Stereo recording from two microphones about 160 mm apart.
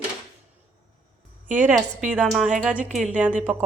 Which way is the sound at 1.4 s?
50° right (ahead or behind).